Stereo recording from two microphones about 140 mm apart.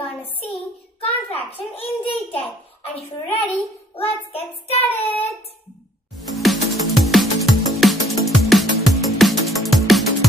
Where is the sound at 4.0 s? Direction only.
45° left (ahead or behind).